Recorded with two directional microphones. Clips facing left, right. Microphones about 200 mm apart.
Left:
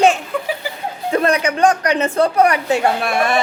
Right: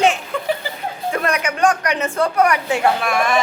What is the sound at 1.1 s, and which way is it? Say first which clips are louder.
A woman's voice: left 5 dB; 30° left (ahead or behind).